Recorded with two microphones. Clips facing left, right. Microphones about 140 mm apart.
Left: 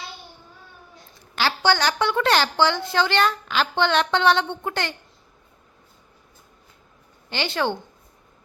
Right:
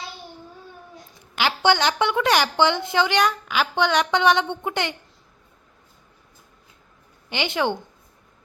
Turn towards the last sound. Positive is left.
turn(degrees=-15)  # may be behind; listen again after turning